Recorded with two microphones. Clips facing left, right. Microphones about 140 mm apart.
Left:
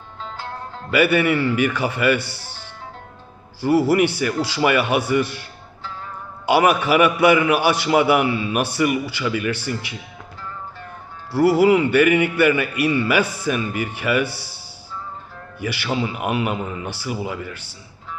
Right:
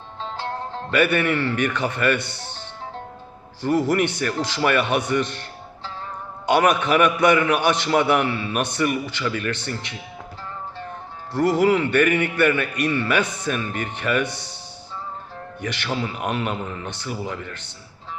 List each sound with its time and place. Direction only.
0.2 s music: 30° right (ahead or behind)
0.9 s a man's voice: 5° left (ahead or behind)
3.6 s a man's voice: 10° left (ahead or behind)
11.3 s a man's voice: 10° left (ahead or behind)
15.6 s a man's voice: 10° left (ahead or behind)